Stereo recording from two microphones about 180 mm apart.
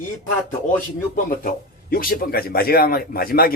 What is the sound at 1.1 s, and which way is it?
A man's voice, 50° left (ahead or behind).